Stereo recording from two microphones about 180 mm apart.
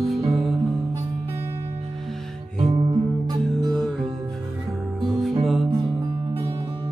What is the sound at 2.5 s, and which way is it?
Music, 30° right (ahead or behind).